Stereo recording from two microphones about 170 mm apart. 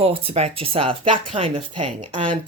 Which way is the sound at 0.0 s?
35° right (ahead or behind).